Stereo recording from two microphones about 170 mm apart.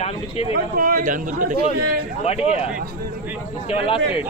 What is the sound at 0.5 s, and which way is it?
A man's voice, 60° right (ahead or behind).